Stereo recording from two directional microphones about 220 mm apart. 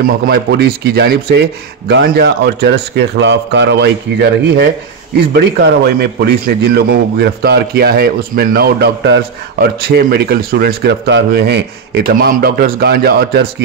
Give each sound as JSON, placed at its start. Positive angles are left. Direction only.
{"t": 0.0, "sound": "a man's voice", "side_deg": -45}